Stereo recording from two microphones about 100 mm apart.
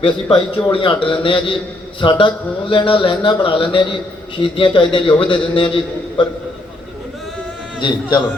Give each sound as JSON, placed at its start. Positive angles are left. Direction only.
{"t": 0.0, "sound": "a man's voice", "side_deg": 55}
{"t": 7.8, "sound": "a man's voice", "side_deg": 50}